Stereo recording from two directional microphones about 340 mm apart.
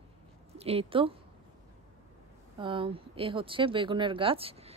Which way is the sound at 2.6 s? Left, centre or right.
Centre.